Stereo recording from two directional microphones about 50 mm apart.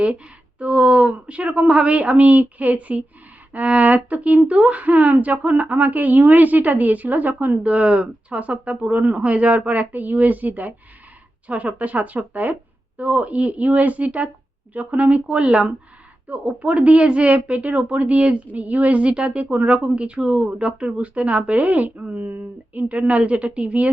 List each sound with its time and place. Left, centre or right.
0.6 s speech: right